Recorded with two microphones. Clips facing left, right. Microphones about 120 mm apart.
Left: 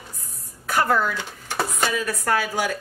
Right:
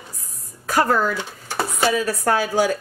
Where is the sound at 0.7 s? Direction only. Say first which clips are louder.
Right 2 dB; 35° right (ahead or behind).